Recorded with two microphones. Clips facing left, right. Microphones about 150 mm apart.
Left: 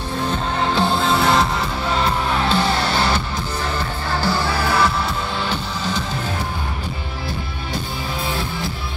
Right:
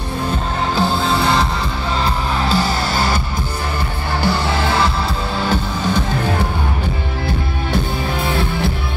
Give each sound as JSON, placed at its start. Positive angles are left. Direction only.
{"t": 0.7, "sound": "music", "side_deg": 0}
{"t": 4.2, "sound": "music", "side_deg": -20}
{"t": 5.5, "sound": "music", "side_deg": -55}
{"t": 8.3, "sound": "music", "side_deg": -60}